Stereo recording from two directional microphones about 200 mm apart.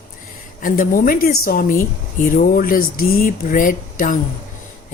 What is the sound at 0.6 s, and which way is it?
A woman's voice, 45° left (ahead or behind).